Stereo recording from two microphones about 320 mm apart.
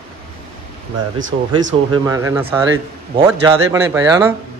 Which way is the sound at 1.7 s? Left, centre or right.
Centre.